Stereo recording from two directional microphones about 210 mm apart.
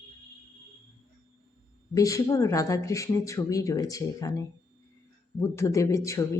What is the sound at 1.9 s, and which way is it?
Speech, 15° left (ahead or behind).